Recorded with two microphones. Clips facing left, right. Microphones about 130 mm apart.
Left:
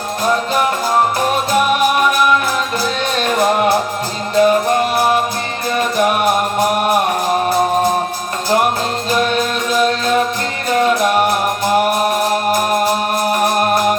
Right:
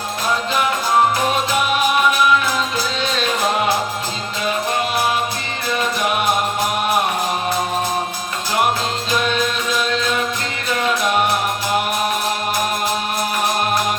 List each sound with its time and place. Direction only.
3.0 s music: 50° left (ahead or behind)
9.0 s music: 45° left (ahead or behind)
13.3 s music: 50° left (ahead or behind)